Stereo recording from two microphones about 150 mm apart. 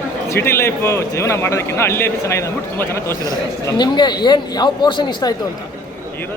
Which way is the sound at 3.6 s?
30° left (ahead or behind).